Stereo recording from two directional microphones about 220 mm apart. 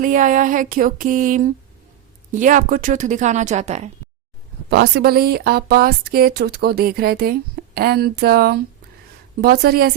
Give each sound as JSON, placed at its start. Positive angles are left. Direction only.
{"t": 0.0, "sound": "speech", "side_deg": -35}
{"t": 4.7, "sound": "speech", "side_deg": -50}